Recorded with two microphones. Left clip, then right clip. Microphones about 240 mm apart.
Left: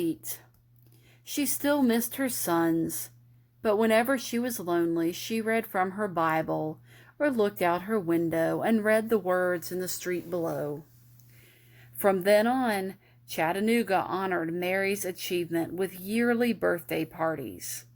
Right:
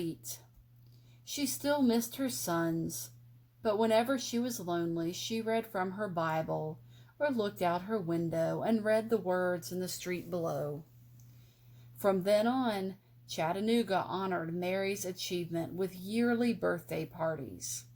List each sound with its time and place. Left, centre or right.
1.6 s speech: left
11.9 s speech: left